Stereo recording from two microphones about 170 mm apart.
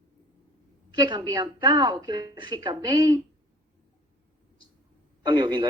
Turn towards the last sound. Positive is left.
turn(degrees=-25)  # may be behind; listen again after turning